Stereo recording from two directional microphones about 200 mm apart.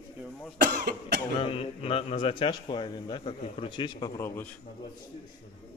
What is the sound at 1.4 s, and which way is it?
A man's voice, 30° left (ahead or behind).